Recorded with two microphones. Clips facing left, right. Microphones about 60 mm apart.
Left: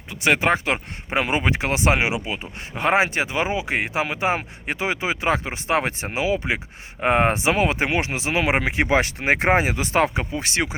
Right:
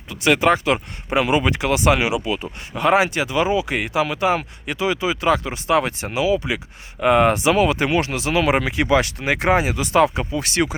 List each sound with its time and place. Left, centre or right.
0.1 s speech: left